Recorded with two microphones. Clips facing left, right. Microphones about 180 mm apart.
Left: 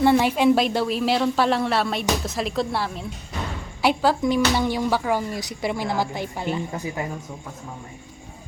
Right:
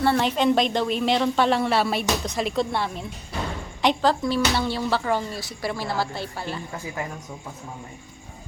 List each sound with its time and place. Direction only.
0.0 s speech: 10° left (ahead or behind)